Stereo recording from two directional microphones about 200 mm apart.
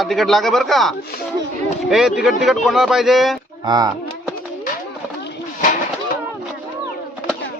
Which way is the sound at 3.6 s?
20° right (ahead or behind).